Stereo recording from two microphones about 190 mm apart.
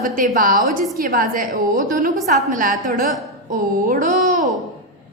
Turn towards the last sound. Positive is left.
turn(degrees=-45)  # may be behind; listen again after turning